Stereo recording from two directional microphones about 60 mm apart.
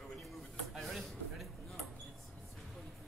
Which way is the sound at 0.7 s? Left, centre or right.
Centre.